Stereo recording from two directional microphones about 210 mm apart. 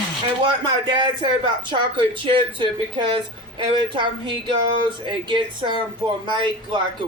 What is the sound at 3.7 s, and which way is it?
Speech, 25° right (ahead or behind).